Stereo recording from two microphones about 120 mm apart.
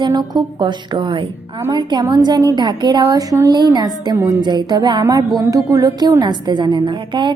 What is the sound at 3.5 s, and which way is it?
A woman's voice, 35° right (ahead or behind).